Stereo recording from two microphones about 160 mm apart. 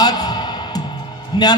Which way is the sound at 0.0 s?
25° left (ahead or behind).